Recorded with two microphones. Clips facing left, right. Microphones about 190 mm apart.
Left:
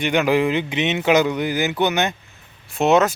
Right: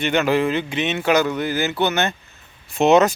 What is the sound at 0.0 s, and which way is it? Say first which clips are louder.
Speech: left 1 dB; 15° left (ahead or behind).